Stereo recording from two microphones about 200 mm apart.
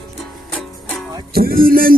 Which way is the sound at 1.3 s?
50° right (ahead or behind).